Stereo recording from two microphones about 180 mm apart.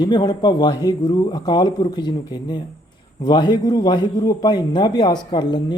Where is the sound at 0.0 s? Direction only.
25° left (ahead or behind).